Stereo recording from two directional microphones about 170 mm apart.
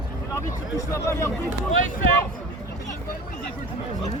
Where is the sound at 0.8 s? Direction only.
15° left (ahead or behind).